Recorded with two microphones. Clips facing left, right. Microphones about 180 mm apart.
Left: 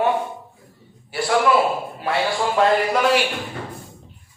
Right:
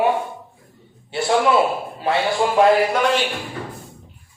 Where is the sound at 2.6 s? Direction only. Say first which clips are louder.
Right 4 dB; 15° right (ahead or behind).